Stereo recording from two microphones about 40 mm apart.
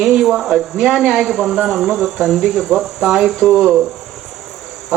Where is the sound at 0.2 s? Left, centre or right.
Centre.